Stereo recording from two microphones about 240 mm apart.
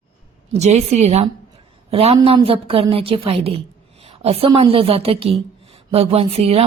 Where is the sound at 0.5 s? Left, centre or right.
Right.